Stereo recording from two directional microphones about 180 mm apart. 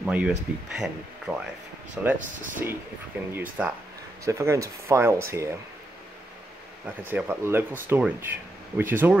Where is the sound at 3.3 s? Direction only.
10° right (ahead or behind).